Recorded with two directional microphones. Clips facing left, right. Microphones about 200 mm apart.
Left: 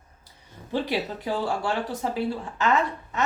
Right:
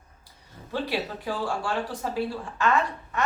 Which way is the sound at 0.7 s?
20° left (ahead or behind).